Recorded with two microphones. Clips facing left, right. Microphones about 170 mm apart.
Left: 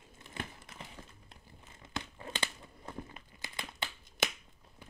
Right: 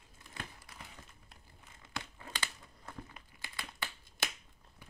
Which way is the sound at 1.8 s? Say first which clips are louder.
Left 4 dB; 25° left (ahead or behind).